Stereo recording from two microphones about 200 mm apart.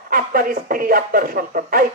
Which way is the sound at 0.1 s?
45° right (ahead or behind).